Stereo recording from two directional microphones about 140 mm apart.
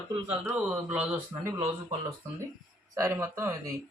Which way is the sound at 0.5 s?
10° right (ahead or behind).